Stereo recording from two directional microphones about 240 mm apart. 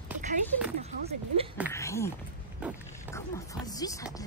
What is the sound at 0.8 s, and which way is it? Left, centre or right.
Speech, right.